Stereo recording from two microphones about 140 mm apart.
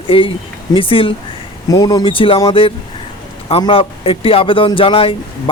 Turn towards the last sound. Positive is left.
turn(degrees=40)  # may be behind; listen again after turning